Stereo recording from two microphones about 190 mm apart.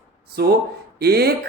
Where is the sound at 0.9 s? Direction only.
55° right (ahead or behind).